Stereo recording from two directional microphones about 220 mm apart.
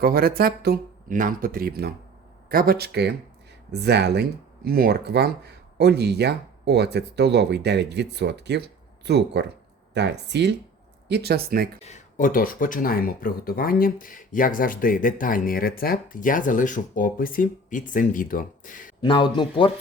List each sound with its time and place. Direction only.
0.0 s speech: 45° right (ahead or behind)
11.8 s speech: 30° left (ahead or behind)
19.0 s speech: 20° left (ahead or behind)